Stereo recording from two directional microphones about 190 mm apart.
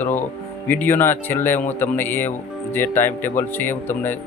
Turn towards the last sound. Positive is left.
turn(degrees=10)  # may be behind; listen again after turning